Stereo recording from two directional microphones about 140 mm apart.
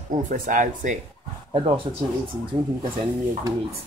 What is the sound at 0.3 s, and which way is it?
Speech, 65° right (ahead or behind).